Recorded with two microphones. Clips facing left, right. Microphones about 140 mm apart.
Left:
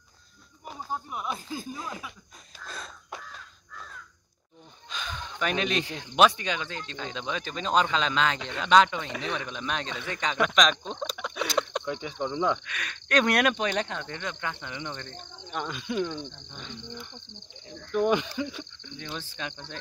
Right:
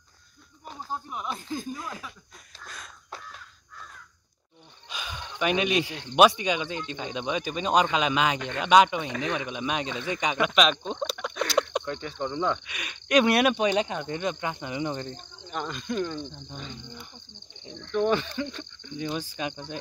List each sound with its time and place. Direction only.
0.7 s speech: 10° left (ahead or behind)
4.8 s a sound: 10° right (ahead or behind)
6.1 s speech: 10° right (ahead or behind)
11.8 s speech: 10° left (ahead or behind)
12.6 s speech: 10° right (ahead or behind); by 15.1 s 30° right (ahead or behind)
15.4 s speech: centre (ahead or behind)
16.3 s speech: 35° right (ahead or behind)
16.5 s speech: centre (ahead or behind)
17.9 s speech: 10° left (ahead or behind)
18.8 s speech: 10° right (ahead or behind)